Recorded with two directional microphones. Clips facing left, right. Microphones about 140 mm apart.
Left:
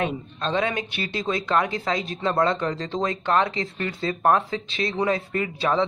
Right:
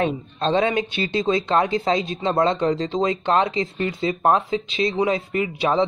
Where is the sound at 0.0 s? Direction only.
30° right (ahead or behind).